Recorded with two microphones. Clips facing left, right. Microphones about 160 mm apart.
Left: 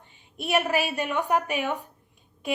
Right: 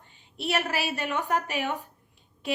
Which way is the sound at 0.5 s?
15° left (ahead or behind).